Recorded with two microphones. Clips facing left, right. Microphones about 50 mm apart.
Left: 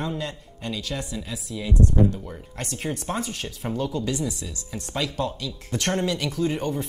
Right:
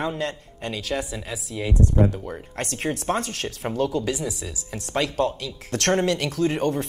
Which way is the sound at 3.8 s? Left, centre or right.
Right.